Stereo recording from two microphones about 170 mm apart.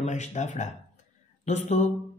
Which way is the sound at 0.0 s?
45° left (ahead or behind).